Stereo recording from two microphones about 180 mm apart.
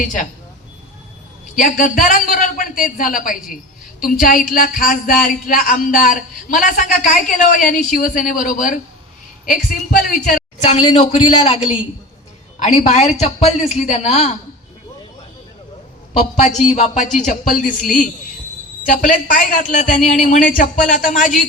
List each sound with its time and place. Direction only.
1.5 s a woman's voice: 45° left (ahead or behind)
16.1 s a woman's voice: 40° left (ahead or behind)